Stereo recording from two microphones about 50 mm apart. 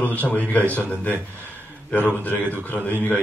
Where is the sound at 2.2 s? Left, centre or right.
Left.